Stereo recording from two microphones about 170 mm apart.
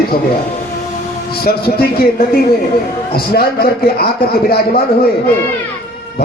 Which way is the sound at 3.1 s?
65° left (ahead or behind).